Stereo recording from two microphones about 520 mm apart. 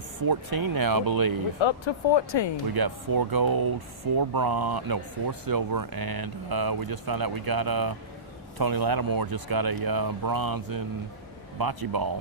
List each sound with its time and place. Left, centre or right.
0.2 s speech: right
1.5 s speech: left
2.7 s speech: right